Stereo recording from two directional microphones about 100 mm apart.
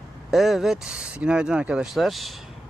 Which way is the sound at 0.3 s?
Centre (ahead or behind).